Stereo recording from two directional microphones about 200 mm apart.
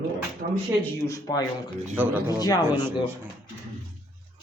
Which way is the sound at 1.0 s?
15° left (ahead or behind).